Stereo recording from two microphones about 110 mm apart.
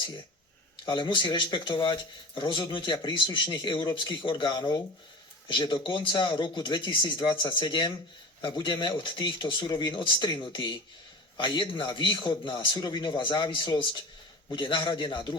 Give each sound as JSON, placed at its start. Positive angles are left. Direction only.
{"t": 0.9, "sound": "speech", "side_deg": 45}